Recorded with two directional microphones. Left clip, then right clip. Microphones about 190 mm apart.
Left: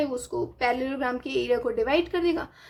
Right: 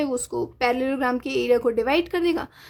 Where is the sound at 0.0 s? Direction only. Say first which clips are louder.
Right 2 dB; 35° right (ahead or behind).